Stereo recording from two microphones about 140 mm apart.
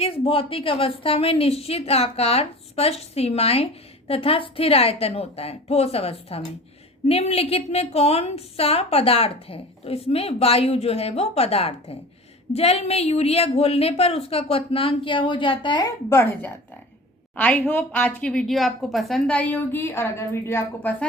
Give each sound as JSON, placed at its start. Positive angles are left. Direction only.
{"t": 0.0, "sound": "a woman's voice", "side_deg": 40}
{"t": 16.0, "sound": "a woman's voice", "side_deg": 15}